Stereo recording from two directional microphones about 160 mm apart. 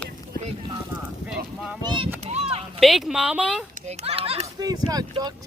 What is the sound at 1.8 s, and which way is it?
Speech, 30° right (ahead or behind).